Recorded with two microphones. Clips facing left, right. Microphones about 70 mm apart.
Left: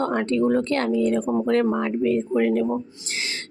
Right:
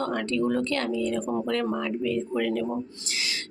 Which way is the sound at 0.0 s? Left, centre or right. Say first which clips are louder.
Left 5 dB; left.